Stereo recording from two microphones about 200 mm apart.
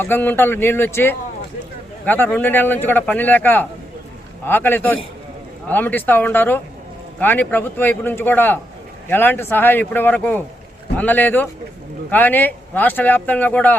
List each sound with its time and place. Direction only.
0.0 s speech: 10° left (ahead or behind)